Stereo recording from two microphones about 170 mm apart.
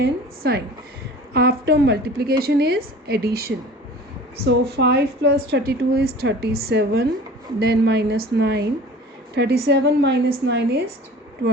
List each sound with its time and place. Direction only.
0.0 s a woman's voice: 70° right (ahead or behind)
4.4 s a woman's voice: 75° right (ahead or behind)